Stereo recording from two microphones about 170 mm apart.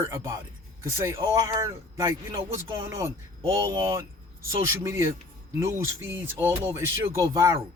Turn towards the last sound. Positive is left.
turn(degrees=-15)  # may be behind; listen again after turning